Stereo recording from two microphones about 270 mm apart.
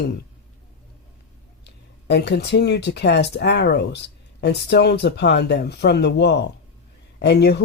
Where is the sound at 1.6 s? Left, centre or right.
Left.